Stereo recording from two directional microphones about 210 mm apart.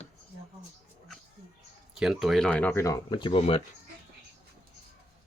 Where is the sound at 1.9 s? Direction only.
Centre (ahead or behind).